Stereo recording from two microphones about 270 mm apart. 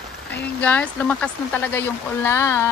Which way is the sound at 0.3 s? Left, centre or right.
Centre.